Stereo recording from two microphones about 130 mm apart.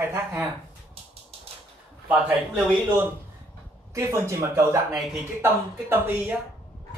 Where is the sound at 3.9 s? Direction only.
20° right (ahead or behind).